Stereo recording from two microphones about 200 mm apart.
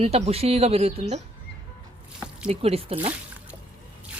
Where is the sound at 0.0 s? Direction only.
30° right (ahead or behind).